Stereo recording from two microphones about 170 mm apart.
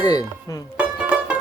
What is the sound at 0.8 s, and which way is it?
Music, 5° right (ahead or behind).